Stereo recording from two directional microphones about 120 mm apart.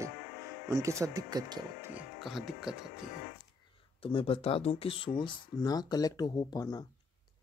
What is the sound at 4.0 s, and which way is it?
Speech, 50° left (ahead or behind).